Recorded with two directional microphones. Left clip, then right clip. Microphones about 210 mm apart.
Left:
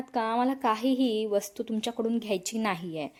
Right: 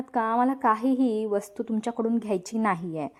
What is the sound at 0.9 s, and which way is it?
A woman's voice, 25° right (ahead or behind).